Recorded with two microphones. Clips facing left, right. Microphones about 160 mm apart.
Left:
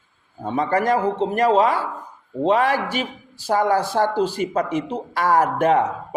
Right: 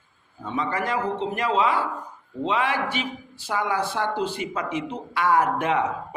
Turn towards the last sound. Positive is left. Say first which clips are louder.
# left 5 dB
turn(degrees=40)  # may be behind; listen again after turning